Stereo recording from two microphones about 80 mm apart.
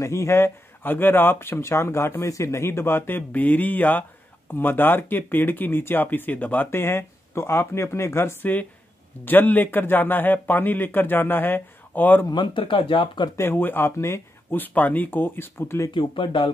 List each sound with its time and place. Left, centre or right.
0.0 s a man's voice: left
12.3 s speech: left
13.4 s speech: left
15.9 s speech: left